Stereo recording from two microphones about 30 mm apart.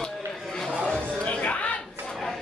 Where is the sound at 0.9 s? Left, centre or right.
Left.